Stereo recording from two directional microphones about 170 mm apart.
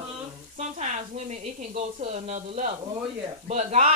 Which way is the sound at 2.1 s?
45° right (ahead or behind).